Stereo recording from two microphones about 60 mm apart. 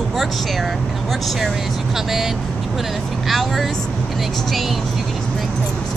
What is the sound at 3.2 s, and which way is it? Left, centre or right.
Speech, centre.